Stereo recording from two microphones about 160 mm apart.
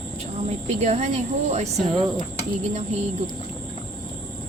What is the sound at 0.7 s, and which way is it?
A woman's voice, 45° right (ahead or behind).